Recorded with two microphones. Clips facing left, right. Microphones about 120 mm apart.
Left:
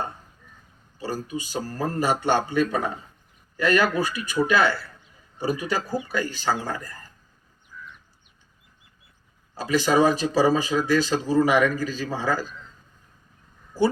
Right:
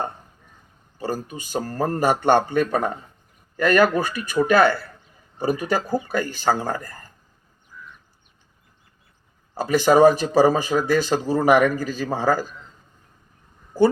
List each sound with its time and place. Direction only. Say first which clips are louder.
0.9 s speech: right 2 dB; 50° right (ahead or behind)
9.6 s speech: right 5 dB; 50° right (ahead or behind)
13.7 s speech: right 5 dB; 50° right (ahead or behind)